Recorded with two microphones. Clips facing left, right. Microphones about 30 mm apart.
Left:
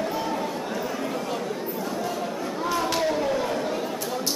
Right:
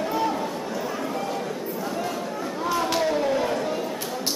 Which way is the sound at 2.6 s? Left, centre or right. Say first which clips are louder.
Right 1 dB; centre.